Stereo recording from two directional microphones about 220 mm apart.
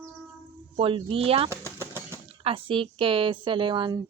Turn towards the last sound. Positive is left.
turn(degrees=-20)  # may be behind; listen again after turning